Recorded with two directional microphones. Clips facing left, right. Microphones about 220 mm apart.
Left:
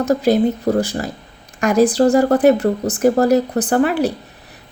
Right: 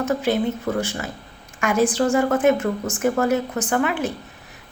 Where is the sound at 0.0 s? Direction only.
40° left (ahead or behind).